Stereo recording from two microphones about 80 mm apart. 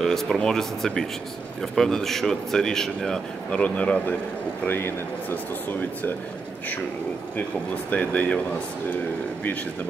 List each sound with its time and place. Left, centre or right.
0.0 s speech: centre
3.6 s speech: centre
7.9 s speech: centre